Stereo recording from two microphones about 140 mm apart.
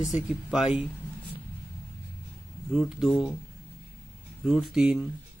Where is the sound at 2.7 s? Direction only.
5° right (ahead or behind).